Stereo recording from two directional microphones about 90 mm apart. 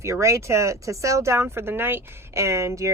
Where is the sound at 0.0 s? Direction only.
35° right (ahead or behind).